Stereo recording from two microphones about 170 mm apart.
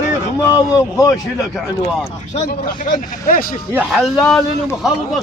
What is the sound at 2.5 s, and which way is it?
Speech, 55° left (ahead or behind).